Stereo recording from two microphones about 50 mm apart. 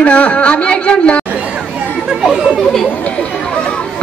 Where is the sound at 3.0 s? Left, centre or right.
Left.